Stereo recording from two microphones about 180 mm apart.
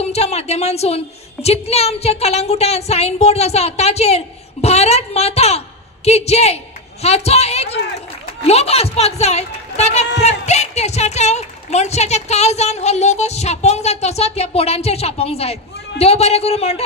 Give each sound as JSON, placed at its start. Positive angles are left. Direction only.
{"t": 0.0, "sound": "a woman's voice", "side_deg": 35}